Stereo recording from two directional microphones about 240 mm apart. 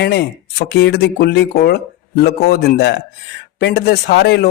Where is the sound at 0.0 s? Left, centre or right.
Left.